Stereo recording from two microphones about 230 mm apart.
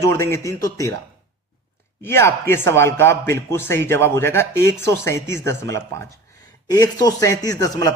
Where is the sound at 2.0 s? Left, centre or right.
Centre.